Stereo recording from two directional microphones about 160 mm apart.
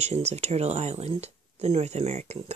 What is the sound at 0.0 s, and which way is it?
Speech, 45° right (ahead or behind).